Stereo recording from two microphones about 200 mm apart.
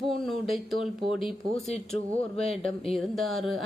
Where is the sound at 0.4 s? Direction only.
Centre (ahead or behind).